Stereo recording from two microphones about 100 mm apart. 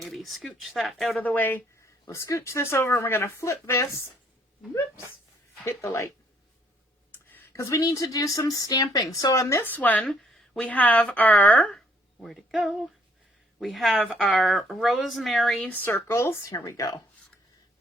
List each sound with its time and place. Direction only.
0.0 s speech: centre (ahead or behind)
1.2 s speech: 15° left (ahead or behind)
2.0 s speech: 35° left (ahead or behind)
5.6 s speech: 30° left (ahead or behind)
7.1 s speech: 20° left (ahead or behind)
9.6 s speech: 15° left (ahead or behind)
10.1 s speech: 5° left (ahead or behind)
12.2 s speech: centre (ahead or behind)
15.6 s speech: 20° left (ahead or behind)